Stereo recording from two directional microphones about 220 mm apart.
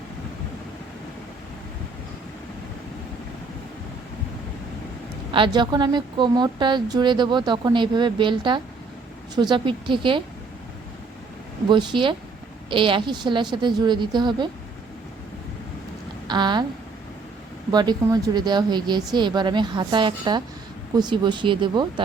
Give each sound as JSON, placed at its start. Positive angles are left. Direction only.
{"t": 5.3, "sound": "a woman's voice", "side_deg": -20}
{"t": 11.7, "sound": "a woman's voice", "side_deg": -20}
{"t": 16.2, "sound": "speech", "side_deg": -20}
{"t": 17.7, "sound": "a woman's voice", "side_deg": -20}